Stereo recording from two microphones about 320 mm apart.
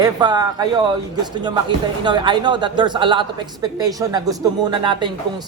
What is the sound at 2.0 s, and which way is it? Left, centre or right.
A man's voice, centre.